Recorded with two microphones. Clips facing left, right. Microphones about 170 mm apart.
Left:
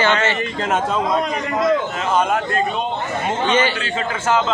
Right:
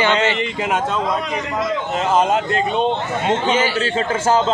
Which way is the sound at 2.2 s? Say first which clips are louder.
Even; 25° right (ahead or behind).